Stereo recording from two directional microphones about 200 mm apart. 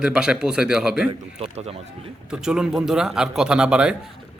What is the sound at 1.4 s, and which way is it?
Speech, 30° right (ahead or behind).